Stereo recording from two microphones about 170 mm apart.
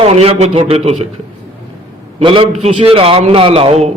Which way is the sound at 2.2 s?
30° right (ahead or behind).